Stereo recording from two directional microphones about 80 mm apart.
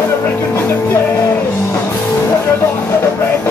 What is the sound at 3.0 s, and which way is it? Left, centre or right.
Music, left.